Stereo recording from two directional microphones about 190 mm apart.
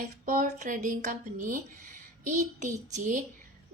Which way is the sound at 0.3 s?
45° right (ahead or behind).